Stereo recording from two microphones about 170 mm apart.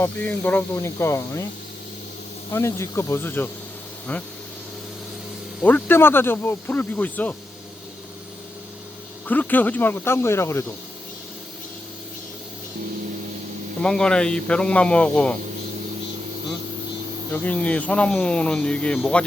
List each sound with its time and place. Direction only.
0.0 s speech: 10° left (ahead or behind)
2.5 s speech: 15° left (ahead or behind)
5.6 s speech: 10° left (ahead or behind)
9.2 s speech: 10° left (ahead or behind)
13.8 s speech: 5° left (ahead or behind)
17.4 s speech: 10° left (ahead or behind)